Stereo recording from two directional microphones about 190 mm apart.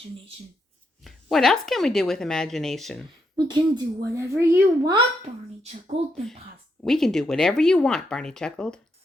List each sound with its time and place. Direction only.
1.0 s speech: centre (ahead or behind)
3.3 s a woman's voice: 20° right (ahead or behind)
5.9 s speech: 35° right (ahead or behind)
6.8 s speech: centre (ahead or behind)